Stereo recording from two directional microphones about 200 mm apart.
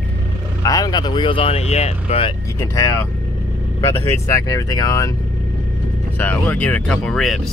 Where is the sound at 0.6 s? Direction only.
20° left (ahead or behind).